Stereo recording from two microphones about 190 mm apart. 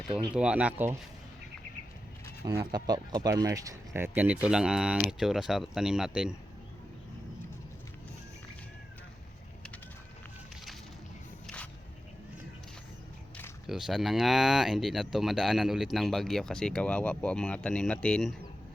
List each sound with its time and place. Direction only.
0.3 s speech: 5° right (ahead or behind)
2.4 s speech: 20° right (ahead or behind)
11.4 s a sound: 5° left (ahead or behind)
13.7 s speech: centre (ahead or behind)